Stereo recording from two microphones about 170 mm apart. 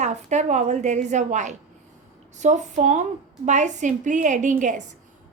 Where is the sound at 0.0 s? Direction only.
45° right (ahead or behind).